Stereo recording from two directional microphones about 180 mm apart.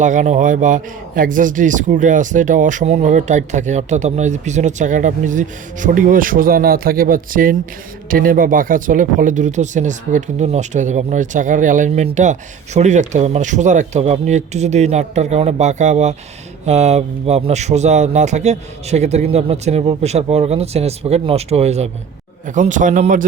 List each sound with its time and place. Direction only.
0.0 s a man's voice: 45° right (ahead or behind)